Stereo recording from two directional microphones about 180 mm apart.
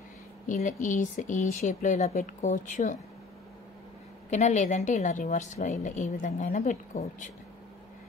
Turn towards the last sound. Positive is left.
turn(degrees=40)  # may be behind; listen again after turning